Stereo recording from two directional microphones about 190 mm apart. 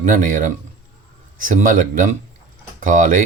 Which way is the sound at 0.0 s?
45° right (ahead or behind).